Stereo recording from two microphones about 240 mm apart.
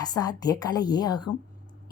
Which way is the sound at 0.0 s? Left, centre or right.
Centre.